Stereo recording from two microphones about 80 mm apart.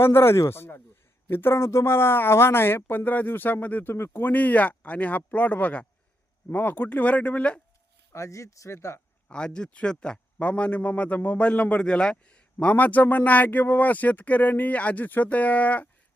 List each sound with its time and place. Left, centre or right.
0.0 s a man's voice: left
8.1 s speech: left
9.3 s a man's voice: centre